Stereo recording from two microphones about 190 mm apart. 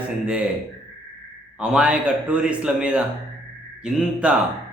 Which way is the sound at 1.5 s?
5° right (ahead or behind).